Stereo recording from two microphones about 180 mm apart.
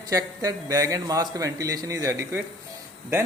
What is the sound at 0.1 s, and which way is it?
A man's voice, 20° right (ahead or behind).